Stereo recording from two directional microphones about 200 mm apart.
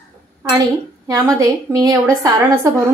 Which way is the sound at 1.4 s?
15° right (ahead or behind).